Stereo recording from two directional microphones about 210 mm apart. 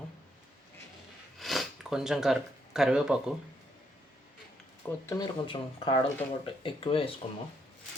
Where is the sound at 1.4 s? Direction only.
Centre (ahead or behind).